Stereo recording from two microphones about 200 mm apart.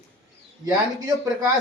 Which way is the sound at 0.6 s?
20° right (ahead or behind).